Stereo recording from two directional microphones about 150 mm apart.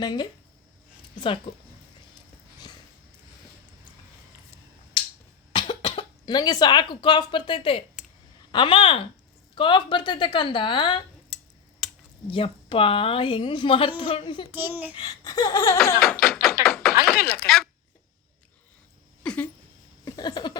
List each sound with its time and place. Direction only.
0.0 s laughter: 30° left (ahead or behind)
1.5 s a woman's voice: 30° left (ahead or behind)
4.9 s finger snapping: 30° left (ahead or behind)
5.5 s a woman's voice: 35° left (ahead or behind)
11.8 s computer keyboard: centre (ahead or behind)
12.3 s a woman's voice: 35° left (ahead or behind)
14.5 s a child's voice: 10° right (ahead or behind)
14.9 s laughter: 30° left (ahead or behind)
16.2 s music: centre (ahead or behind)
16.6 s a sound: centre (ahead or behind)
17.2 s speech: 90° left
17.4 s speech: centre (ahead or behind)
19.2 s a sound: 5° left (ahead or behind)
20.1 s a sound: 25° left (ahead or behind)